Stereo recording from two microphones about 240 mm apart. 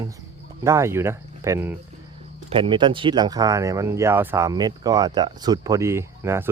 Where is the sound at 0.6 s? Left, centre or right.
Centre.